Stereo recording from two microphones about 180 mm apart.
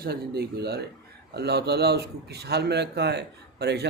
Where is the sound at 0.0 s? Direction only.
60° right (ahead or behind).